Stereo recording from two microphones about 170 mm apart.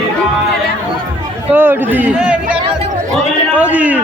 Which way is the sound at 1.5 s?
10° right (ahead or behind).